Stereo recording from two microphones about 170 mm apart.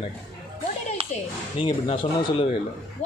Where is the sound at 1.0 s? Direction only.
35° right (ahead or behind).